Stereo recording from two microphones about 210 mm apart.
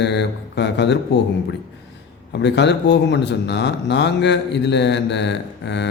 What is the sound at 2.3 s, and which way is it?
Speech, 55° left (ahead or behind).